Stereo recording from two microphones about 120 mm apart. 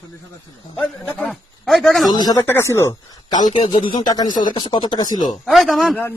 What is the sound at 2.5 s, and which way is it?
Speech, 20° left (ahead or behind).